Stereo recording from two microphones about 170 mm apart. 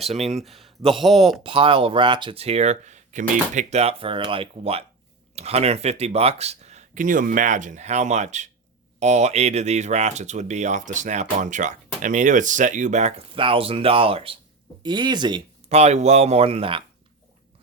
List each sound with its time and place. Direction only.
0.1 s speech: 40° right (ahead or behind)
0.4 s speech: centre (ahead or behind)
1.5 s speech: 30° right (ahead or behind)
15.7 s speech: 40° right (ahead or behind)